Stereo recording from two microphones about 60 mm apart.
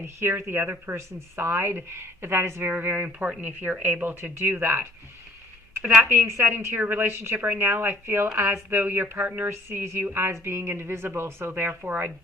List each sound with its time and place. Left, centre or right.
0.0 s a woman's voice: right
2.6 s a woman's voice: right
6.1 s a woman's voice: right